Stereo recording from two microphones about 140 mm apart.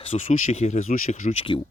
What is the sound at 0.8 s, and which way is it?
Speech, 75° left (ahead or behind).